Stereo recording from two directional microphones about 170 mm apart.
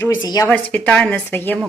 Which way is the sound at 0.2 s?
20° left (ahead or behind).